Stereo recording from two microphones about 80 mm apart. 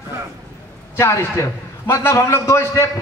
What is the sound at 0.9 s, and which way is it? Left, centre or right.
A man's voice, left.